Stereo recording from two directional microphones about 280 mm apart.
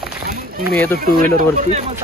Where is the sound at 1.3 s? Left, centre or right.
Right.